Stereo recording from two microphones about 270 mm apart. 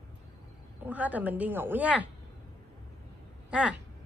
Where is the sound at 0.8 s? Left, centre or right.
Centre.